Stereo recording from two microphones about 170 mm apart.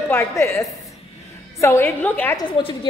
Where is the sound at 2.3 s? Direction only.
30° left (ahead or behind).